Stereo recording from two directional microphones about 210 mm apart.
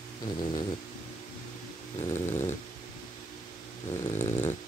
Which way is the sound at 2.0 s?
15° left (ahead or behind).